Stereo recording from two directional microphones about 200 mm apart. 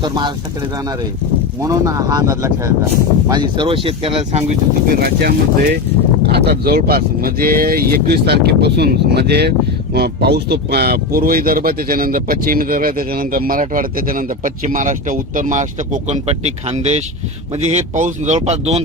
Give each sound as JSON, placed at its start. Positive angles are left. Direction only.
{"t": 1.6, "sound": "speech", "side_deg": -15}
{"t": 5.0, "sound": "speech", "side_deg": -50}